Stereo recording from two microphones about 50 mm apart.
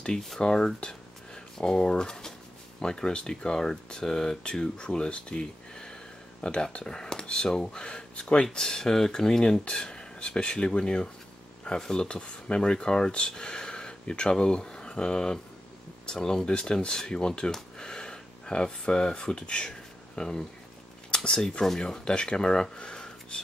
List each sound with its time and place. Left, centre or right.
0.4 s speech: centre